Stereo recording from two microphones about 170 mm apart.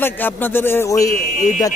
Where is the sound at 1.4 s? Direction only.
45° left (ahead or behind).